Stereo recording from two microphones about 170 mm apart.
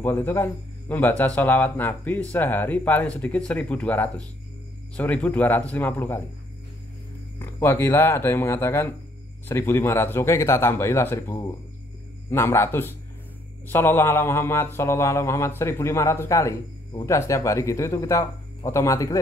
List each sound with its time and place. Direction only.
0.0 s a man's voice: 10° left (ahead or behind)
7.3 s a man's voice: 15° left (ahead or behind)